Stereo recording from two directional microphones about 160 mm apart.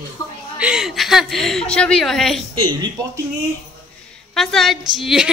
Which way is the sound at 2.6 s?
25° right (ahead or behind).